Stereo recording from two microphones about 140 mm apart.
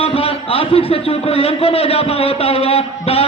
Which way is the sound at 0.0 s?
45° left (ahead or behind).